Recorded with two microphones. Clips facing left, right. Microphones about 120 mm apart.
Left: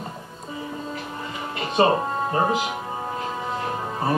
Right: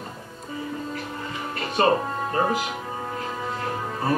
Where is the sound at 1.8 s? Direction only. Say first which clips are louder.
Left 2 dB; 20° left (ahead or behind).